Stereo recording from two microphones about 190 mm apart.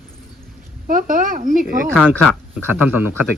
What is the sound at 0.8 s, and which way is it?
Speech, 45° right (ahead or behind).